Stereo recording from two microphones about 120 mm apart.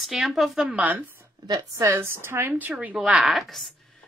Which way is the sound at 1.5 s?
25° right (ahead or behind).